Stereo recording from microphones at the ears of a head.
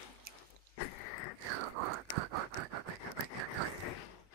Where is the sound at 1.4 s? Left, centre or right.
Right.